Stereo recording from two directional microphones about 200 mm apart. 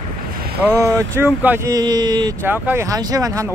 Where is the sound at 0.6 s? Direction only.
15° right (ahead or behind).